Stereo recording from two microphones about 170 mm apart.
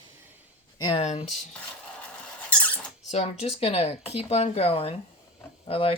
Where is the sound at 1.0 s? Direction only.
35° left (ahead or behind).